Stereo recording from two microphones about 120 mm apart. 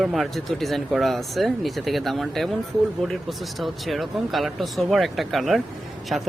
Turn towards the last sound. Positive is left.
turn(degrees=0)  # may be behind; listen again after turning